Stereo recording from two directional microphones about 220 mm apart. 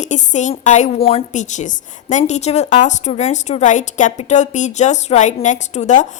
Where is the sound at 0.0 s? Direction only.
35° left (ahead or behind).